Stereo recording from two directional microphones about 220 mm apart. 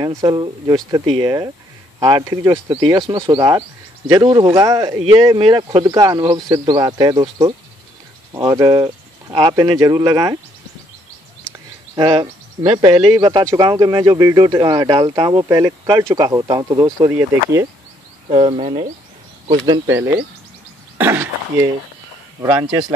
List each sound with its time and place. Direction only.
0.0 s speech: 15° right (ahead or behind)
11.9 s speech: 20° right (ahead or behind)
18.3 s speech: 25° right (ahead or behind)